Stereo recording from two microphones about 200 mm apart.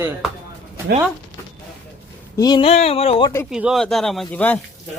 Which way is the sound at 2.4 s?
20° left (ahead or behind).